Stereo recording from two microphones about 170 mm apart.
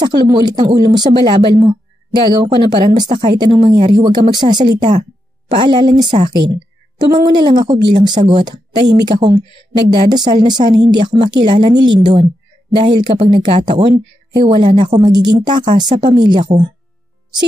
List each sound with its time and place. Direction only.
0.0 s speech: 25° right (ahead or behind)
6.3 s a sound: 25° right (ahead or behind)
7.2 s speech: 25° right (ahead or behind)